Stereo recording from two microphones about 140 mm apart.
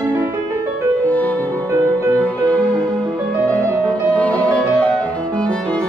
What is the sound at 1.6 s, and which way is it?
Music, 20° right (ahead or behind).